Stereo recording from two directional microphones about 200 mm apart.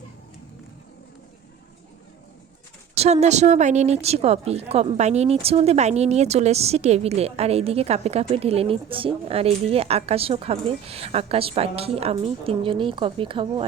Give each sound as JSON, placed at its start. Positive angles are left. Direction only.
{"t": 2.9, "sound": "a woman's voice", "side_deg": -30}